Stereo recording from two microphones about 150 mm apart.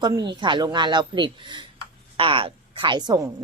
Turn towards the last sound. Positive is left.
turn(degrees=-25)  # may be behind; listen again after turning